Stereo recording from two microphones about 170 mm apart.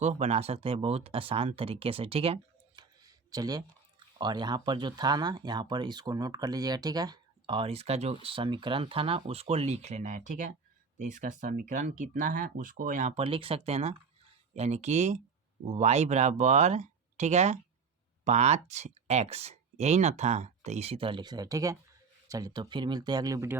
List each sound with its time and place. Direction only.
0.0 s speech: 40° right (ahead or behind)
3.0 s a sound: 20° right (ahead or behind)
4.2 s speech: 25° right (ahead or behind)